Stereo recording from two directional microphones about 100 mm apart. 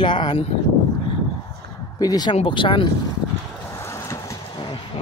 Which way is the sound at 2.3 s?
55° left (ahead or behind).